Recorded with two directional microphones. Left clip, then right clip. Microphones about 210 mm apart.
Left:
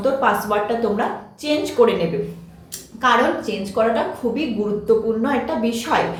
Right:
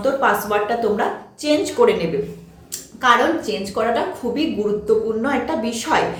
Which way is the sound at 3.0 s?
15° right (ahead or behind).